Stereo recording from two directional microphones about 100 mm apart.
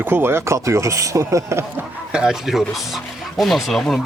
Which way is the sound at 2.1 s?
5° right (ahead or behind).